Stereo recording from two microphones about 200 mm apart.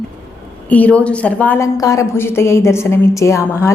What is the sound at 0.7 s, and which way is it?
A woman's voice, 5° left (ahead or behind).